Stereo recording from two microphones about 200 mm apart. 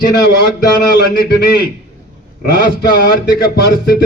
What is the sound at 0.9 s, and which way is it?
Speech, 55° left (ahead or behind).